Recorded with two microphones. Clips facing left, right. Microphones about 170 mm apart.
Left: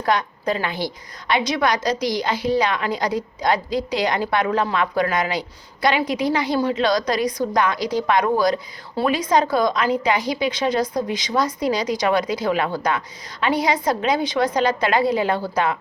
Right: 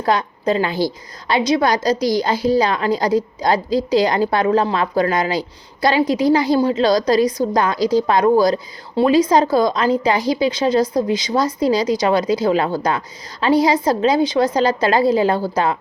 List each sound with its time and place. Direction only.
0.0 s a woman's voice: 25° right (ahead or behind)